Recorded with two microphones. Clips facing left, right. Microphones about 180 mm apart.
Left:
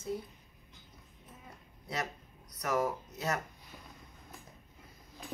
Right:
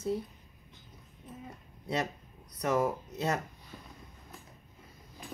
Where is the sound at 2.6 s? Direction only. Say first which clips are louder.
Right 3 dB; 30° right (ahead or behind).